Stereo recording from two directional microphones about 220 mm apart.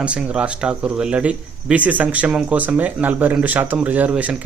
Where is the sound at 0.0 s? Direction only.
5° right (ahead or behind).